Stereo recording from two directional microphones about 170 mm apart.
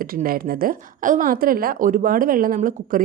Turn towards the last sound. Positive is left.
turn(degrees=-55)  # may be behind; listen again after turning